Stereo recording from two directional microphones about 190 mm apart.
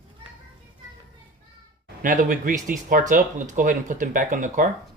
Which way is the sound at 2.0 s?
45° right (ahead or behind).